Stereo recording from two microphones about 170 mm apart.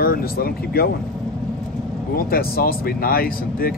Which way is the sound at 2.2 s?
60° left (ahead or behind).